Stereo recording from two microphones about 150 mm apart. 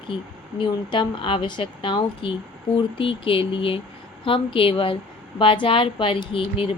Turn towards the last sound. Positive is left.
turn(degrees=35)  # may be behind; listen again after turning